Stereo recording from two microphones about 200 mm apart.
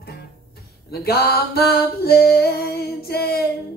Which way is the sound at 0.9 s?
50° left (ahead or behind).